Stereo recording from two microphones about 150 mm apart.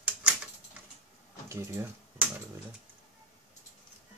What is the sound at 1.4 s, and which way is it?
Typing, 20° right (ahead or behind).